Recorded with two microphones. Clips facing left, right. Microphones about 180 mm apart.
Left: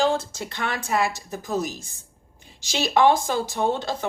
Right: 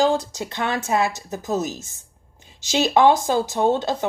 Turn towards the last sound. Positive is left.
turn(degrees=-20)  # may be behind; listen again after turning